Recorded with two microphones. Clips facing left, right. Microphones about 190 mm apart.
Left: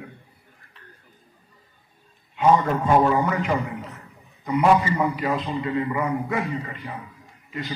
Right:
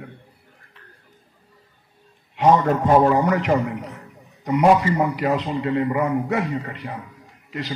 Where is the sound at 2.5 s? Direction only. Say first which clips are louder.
Right 3 dB; 45° right (ahead or behind).